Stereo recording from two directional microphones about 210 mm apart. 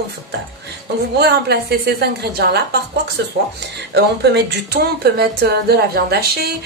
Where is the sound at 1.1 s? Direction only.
50° right (ahead or behind).